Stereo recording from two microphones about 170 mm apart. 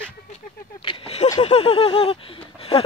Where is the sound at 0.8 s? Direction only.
30° left (ahead or behind).